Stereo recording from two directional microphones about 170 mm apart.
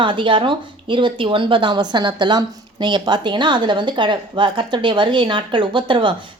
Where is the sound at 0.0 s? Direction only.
30° right (ahead or behind).